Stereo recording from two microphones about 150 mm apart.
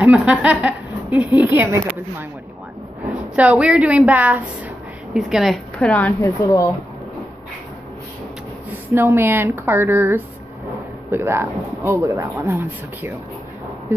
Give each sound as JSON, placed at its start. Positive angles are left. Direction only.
{"t": 0.0, "sound": "speech", "side_deg": -10}
{"t": 3.3, "sound": "speech", "side_deg": -10}
{"t": 8.9, "sound": "speech", "side_deg": -15}